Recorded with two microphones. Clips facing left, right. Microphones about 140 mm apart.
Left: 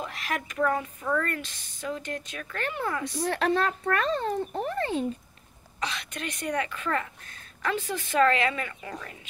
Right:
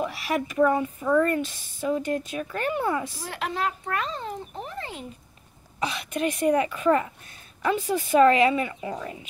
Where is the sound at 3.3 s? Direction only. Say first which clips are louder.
Left 6 dB; 65° left (ahead or behind).